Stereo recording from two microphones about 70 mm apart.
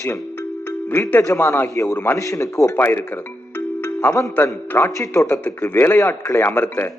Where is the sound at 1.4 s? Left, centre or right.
Left.